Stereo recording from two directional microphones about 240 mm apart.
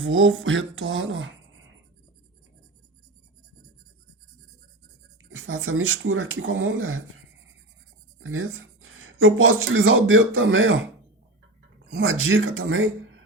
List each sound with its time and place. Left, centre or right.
0.0 s speech: right
5.3 s speech: right
8.2 s speech: right
11.9 s speech: right